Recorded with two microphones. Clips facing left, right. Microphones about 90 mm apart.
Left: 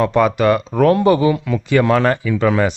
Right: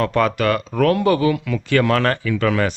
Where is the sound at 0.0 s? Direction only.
15° left (ahead or behind).